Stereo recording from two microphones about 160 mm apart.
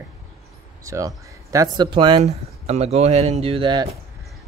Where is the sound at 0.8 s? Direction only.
20° right (ahead or behind).